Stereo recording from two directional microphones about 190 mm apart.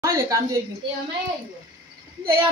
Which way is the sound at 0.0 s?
15° right (ahead or behind).